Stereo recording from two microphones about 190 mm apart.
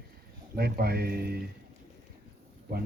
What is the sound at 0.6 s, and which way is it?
Speech, 55° right (ahead or behind).